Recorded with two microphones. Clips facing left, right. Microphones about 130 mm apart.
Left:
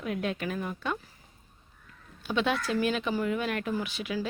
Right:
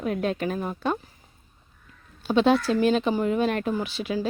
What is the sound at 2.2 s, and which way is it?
A woman's voice, 35° right (ahead or behind).